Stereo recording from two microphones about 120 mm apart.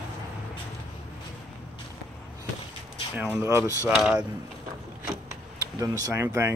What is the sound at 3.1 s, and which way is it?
Speech, 15° right (ahead or behind).